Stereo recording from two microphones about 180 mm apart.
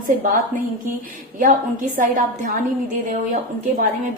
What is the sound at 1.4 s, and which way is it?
Speech, 45° right (ahead or behind).